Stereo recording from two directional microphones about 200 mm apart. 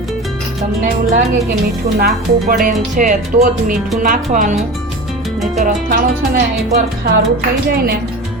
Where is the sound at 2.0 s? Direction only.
45° right (ahead or behind).